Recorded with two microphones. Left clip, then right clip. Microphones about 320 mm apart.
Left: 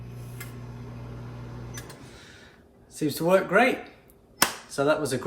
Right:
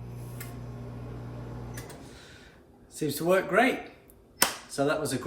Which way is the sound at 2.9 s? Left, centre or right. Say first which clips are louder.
Left 3 dB; centre.